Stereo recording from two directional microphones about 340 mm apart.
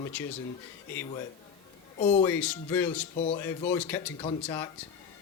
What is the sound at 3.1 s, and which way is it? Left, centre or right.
Speech, centre.